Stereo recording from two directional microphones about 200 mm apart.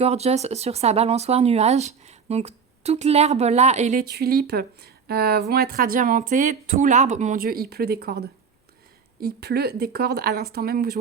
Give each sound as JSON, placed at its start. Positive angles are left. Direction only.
{"t": 0.0, "sound": "speech", "side_deg": -30}
{"t": 4.0, "sound": "speech", "side_deg": -50}